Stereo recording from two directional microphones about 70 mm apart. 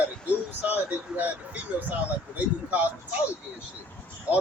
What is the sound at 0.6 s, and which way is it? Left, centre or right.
A man's voice, right.